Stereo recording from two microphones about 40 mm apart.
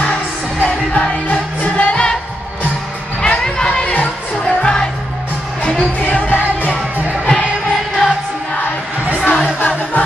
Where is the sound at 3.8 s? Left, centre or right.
Left.